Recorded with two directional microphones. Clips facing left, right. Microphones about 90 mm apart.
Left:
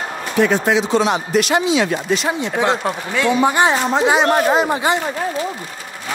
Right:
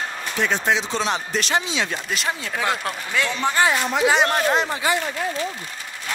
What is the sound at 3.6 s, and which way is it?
Speech, 30° left (ahead or behind).